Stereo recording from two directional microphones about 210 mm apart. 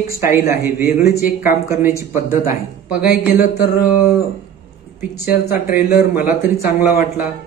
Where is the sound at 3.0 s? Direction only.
50° left (ahead or behind).